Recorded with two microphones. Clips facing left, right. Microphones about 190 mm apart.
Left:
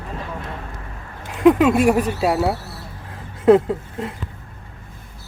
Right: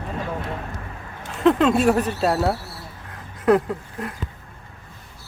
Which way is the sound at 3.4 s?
25° left (ahead or behind).